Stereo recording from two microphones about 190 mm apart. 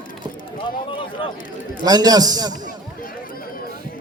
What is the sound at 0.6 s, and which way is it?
Speech, 25° left (ahead or behind).